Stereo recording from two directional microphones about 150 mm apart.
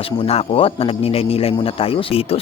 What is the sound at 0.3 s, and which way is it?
A man's voice, 40° left (ahead or behind).